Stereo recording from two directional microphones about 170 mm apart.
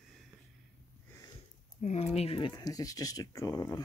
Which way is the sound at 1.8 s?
40° left (ahead or behind).